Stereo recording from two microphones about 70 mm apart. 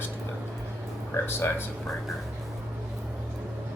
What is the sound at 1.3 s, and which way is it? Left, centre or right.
Speech, left.